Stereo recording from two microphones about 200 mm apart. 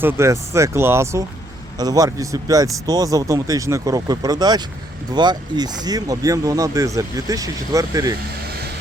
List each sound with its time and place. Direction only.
0.0 s speech: 10° right (ahead or behind)